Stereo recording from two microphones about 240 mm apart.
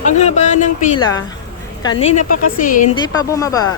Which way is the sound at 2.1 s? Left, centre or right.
Left.